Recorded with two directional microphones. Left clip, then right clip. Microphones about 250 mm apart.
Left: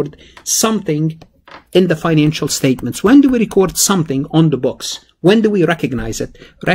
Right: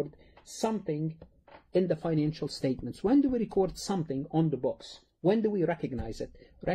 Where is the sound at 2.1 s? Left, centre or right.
Left.